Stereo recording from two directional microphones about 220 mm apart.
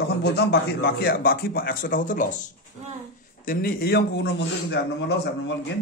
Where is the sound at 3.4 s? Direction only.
40° left (ahead or behind).